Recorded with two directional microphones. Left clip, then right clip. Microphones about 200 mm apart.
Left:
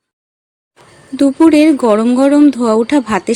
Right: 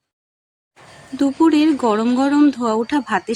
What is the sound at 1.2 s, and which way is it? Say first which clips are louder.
Speech: left 7 dB; 25° left (ahead or behind).